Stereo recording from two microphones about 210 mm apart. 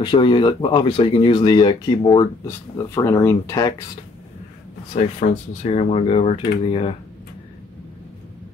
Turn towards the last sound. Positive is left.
turn(degrees=30)  # may be behind; listen again after turning